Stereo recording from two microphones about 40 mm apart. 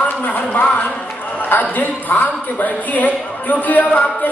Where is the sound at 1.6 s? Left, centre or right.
Left.